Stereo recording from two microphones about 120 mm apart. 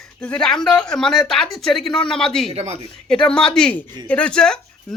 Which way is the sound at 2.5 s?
65° right (ahead or behind).